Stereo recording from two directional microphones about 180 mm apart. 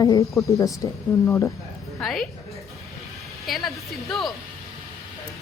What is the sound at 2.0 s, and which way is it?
Speech, centre (ahead or behind).